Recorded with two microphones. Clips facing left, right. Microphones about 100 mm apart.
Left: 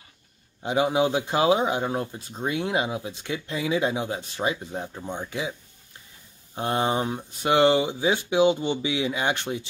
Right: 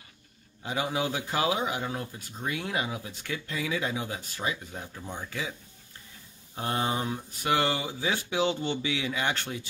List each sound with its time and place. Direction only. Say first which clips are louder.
0.6 s speech: left 8 dB; 20° left (ahead or behind)
6.5 s speech: left 5 dB; 35° left (ahead or behind)